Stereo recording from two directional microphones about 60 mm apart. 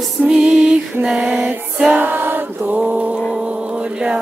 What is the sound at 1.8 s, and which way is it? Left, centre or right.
Music, right.